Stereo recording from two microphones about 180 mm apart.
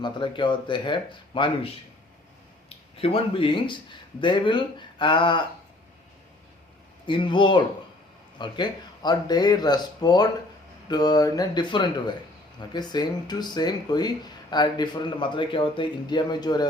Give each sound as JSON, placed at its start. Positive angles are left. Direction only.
{"t": 0.0, "sound": "speech", "side_deg": 25}
{"t": 7.0, "sound": "speech", "side_deg": 25}